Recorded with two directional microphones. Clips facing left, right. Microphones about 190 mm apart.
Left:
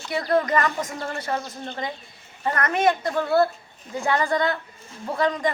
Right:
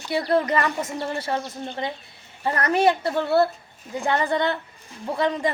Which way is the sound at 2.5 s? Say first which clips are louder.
Right 3 dB; 35° right (ahead or behind).